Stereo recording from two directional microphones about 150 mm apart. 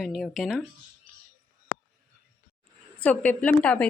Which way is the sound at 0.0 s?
Centre (ahead or behind).